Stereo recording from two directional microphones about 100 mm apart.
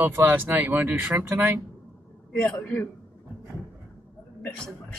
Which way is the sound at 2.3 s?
25° left (ahead or behind).